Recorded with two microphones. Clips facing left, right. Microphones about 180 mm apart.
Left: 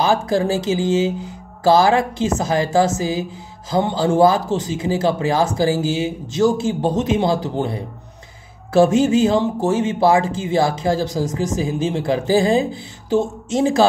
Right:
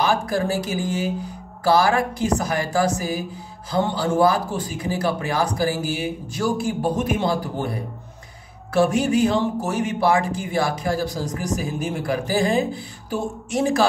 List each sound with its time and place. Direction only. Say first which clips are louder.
0.0 s speech: left 4 dB; 25° left (ahead or behind)